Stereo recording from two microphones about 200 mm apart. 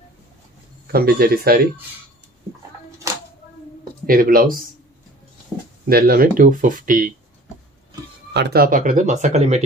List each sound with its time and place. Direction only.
0.9 s speech: 50° right (ahead or behind)
4.0 s speech: 45° right (ahead or behind)
5.9 s speech: 50° right (ahead or behind)
8.3 s speech: 55° right (ahead or behind); by 9.6 s 35° right (ahead or behind)